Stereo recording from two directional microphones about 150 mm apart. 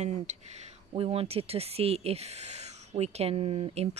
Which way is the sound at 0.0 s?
50° right (ahead or behind).